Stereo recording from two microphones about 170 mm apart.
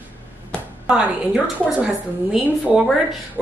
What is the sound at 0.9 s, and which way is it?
A woman's voice, 5° right (ahead or behind).